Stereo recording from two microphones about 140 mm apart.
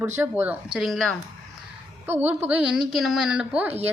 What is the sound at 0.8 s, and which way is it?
Speech, centre (ahead or behind).